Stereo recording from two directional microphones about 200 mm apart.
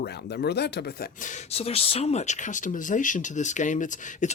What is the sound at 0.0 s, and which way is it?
Speech, 55° left (ahead or behind).